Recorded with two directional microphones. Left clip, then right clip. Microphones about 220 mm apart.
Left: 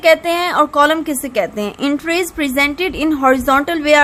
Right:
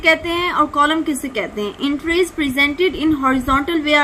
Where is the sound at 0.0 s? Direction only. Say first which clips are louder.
Left 4 dB; 50° left (ahead or behind).